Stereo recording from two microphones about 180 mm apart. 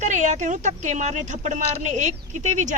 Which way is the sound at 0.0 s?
40° right (ahead or behind).